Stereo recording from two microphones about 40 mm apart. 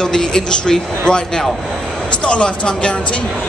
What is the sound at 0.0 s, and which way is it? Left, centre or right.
A man's voice, centre.